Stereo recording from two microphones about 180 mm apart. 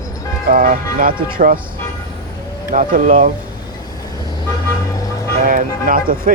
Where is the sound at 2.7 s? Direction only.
45° right (ahead or behind).